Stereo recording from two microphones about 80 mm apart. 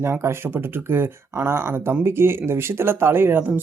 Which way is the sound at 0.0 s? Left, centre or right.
Right.